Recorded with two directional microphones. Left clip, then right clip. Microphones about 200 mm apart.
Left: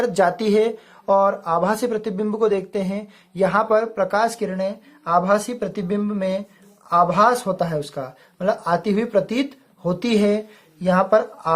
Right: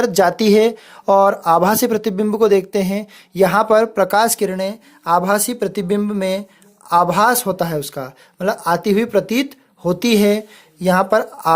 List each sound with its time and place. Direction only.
0.0 s speech: 40° right (ahead or behind)